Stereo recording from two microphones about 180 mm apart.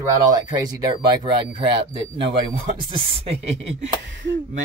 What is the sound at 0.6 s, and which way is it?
Speech, 20° right (ahead or behind).